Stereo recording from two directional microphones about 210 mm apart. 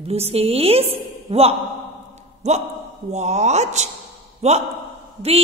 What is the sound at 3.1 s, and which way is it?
A woman's voice, 30° right (ahead or behind).